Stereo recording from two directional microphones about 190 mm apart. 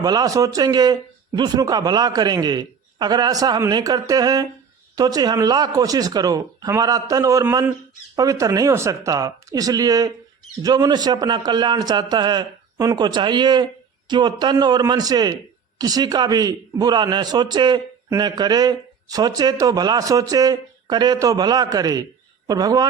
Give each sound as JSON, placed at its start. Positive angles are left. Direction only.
{"t": 0.0, "sound": "a man's voice", "side_deg": -20}